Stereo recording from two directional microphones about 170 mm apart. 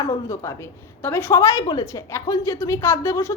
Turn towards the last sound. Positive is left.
turn(degrees=15)  # may be behind; listen again after turning